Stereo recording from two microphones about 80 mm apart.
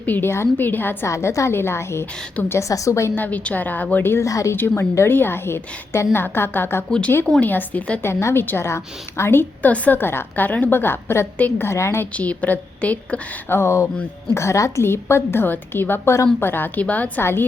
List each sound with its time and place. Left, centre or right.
0.0 s a woman's voice: left
1.0 s a woman's voice: left
3.2 s a woman's voice: left
4.2 s speech: left
4.5 s a woman's voice: left
8.0 s a woman's voice: left
11.7 s a woman's voice: left
12.1 s a woman's voice: centre
13.5 s a woman's voice: left